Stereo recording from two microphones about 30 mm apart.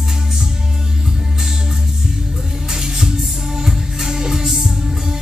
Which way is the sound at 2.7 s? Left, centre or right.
Centre.